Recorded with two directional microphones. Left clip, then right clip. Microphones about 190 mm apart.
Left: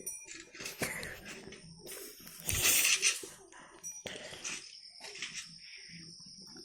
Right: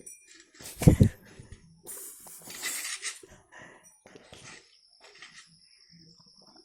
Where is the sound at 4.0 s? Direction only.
20° left (ahead or behind).